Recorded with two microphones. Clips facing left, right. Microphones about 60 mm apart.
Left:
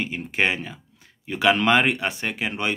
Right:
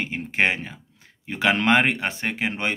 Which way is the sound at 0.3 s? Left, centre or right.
Right.